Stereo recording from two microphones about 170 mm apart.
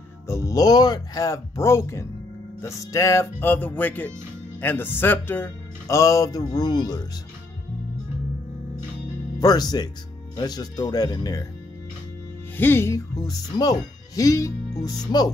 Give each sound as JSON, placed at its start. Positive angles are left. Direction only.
{"t": 0.3, "sound": "speech", "side_deg": 20}
{"t": 9.4, "sound": "speech", "side_deg": 25}
{"t": 12.5, "sound": "speech", "side_deg": 15}